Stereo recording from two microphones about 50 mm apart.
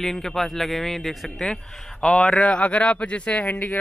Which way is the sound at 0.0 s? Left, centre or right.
Centre.